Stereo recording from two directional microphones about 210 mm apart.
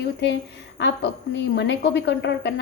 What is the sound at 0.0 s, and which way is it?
Speech, 55° left (ahead or behind).